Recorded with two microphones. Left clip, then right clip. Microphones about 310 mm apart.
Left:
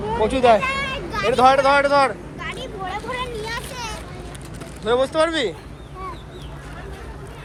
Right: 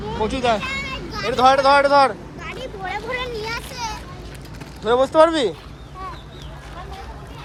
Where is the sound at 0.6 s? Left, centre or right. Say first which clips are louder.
Left 3 dB; centre.